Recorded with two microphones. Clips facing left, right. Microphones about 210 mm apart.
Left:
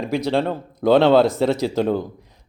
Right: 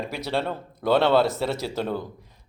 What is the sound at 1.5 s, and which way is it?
Speech, 15° left (ahead or behind).